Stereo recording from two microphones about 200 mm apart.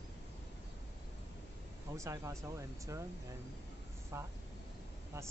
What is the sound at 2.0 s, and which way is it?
Speech, 15° right (ahead or behind).